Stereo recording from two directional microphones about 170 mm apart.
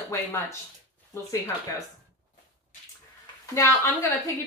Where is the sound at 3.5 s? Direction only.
15° left (ahead or behind).